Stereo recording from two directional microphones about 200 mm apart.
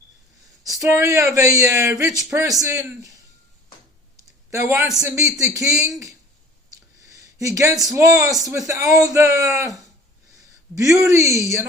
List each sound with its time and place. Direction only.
0.6 s speech: 15° right (ahead or behind)
4.5 s speech: 15° right (ahead or behind)
7.1 s a sound: 15° right (ahead or behind)
7.9 s speech: 15° right (ahead or behind)
10.8 s speech: 15° right (ahead or behind)